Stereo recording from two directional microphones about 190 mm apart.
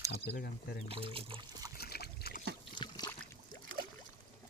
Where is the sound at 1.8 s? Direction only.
55° left (ahead or behind).